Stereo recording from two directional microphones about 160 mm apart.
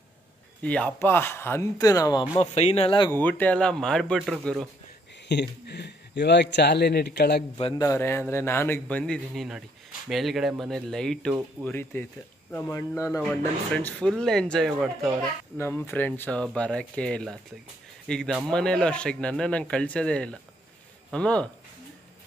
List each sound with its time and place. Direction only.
0.6 s a man's voice: 10° left (ahead or behind)
2.5 s speech: 40° left (ahead or behind)
3.1 s speech: 10° left (ahead or behind)
5.3 s speech: 90° left
7.5 s speech: 35° left (ahead or behind)
7.8 s a man's voice: 15° left (ahead or behind)
13.7 s speech: 5° left (ahead or behind)
15.5 s a man's voice: 15° left (ahead or behind)